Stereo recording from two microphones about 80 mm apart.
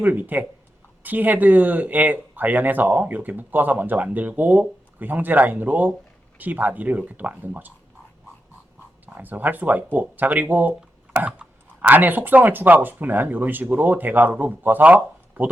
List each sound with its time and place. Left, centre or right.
0.0 s speech: right
9.0 s speech: right